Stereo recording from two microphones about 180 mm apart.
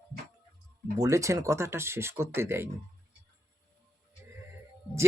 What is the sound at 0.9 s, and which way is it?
Speech, 15° right (ahead or behind).